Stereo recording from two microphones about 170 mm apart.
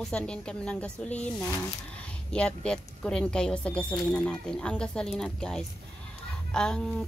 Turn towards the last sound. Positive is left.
turn(degrees=5)  # may be behind; listen again after turning